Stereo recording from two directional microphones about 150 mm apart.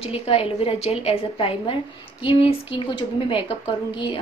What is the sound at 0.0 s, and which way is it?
A woman's voice, 40° left (ahead or behind).